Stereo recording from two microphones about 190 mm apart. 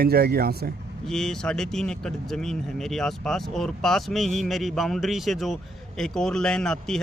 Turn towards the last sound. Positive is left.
turn(degrees=5)  # may be behind; listen again after turning